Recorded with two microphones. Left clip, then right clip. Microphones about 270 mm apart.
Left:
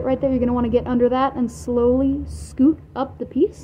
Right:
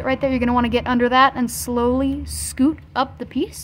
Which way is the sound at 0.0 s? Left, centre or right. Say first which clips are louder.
Even; right.